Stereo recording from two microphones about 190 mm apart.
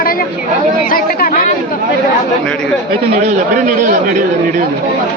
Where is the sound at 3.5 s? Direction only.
45° right (ahead or behind).